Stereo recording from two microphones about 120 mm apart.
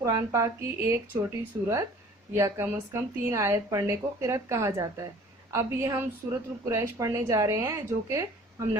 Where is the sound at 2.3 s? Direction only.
20° right (ahead or behind).